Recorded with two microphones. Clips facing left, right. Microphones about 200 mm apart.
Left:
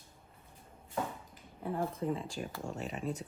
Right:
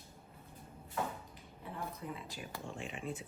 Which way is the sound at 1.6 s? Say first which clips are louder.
Left 9 dB; 50° left (ahead or behind).